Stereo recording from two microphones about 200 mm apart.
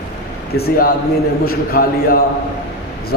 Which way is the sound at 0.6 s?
45° left (ahead or behind).